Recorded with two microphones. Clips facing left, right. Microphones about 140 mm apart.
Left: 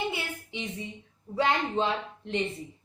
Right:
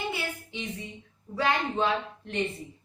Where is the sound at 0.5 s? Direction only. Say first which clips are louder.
Left 1 dB; 20° left (ahead or behind).